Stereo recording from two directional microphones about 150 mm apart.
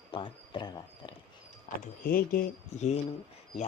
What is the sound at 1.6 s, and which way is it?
Speech, 75° left (ahead or behind).